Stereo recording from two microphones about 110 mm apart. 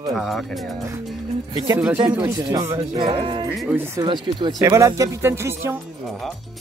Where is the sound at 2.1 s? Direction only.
25° right (ahead or behind).